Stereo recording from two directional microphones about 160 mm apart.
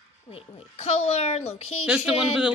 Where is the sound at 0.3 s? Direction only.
35° left (ahead or behind).